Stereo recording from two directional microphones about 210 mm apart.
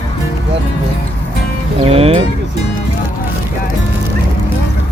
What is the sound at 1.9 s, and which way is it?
Speech, 25° right (ahead or behind).